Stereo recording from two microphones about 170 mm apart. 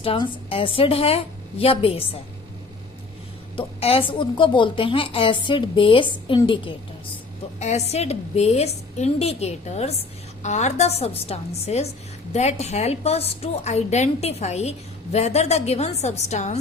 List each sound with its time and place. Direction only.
0.0 s a woman's voice: 35° left (ahead or behind)
3.5 s a woman's voice: 35° left (ahead or behind)
7.6 s a woman's voice: 40° left (ahead or behind)